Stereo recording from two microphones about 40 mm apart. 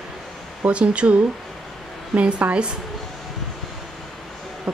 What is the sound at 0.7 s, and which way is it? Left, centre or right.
A woman's voice, right.